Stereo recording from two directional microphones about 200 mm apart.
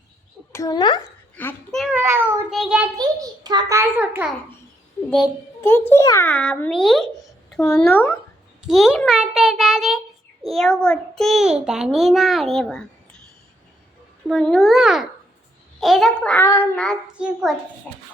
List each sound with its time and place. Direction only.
0.5 s a child's voice: 20° left (ahead or behind)
1.4 s a child's voice: 10° left (ahead or behind)
1.8 s a child's voice: 10° right (ahead or behind)
3.0 s a child's voice: 20° right (ahead or behind)
5.6 s a child's voice: 10° left (ahead or behind)
8.6 s a child's voice: centre (ahead or behind)
14.3 s a child's voice: centre (ahead or behind)